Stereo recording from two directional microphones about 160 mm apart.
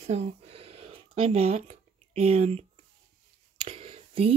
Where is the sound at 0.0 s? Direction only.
45° right (ahead or behind).